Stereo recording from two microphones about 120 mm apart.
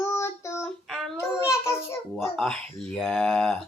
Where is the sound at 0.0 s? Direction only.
25° left (ahead or behind).